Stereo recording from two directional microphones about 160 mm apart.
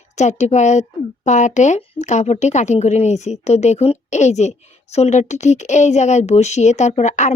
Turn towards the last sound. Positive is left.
turn(degrees=45)  # may be behind; listen again after turning